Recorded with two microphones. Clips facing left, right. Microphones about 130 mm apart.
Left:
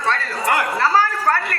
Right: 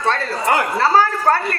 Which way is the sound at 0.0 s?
30° right (ahead or behind).